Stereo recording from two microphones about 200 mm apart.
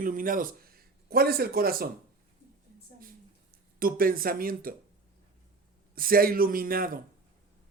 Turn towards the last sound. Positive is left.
turn(degrees=-45)  # may be behind; listen again after turning